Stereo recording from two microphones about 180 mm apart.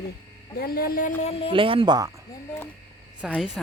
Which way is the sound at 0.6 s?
55° left (ahead or behind).